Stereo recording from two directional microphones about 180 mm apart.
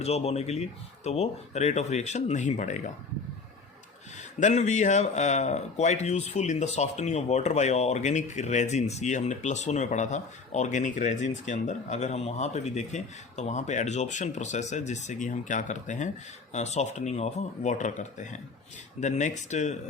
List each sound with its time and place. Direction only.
0.0 s speech: 35° left (ahead or behind)
4.2 s speech: 40° left (ahead or behind)